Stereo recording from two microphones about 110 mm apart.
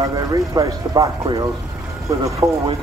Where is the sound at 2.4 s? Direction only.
30° right (ahead or behind).